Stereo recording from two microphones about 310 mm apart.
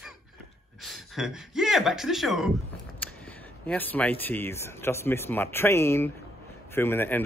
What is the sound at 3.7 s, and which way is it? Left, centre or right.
Speech, centre.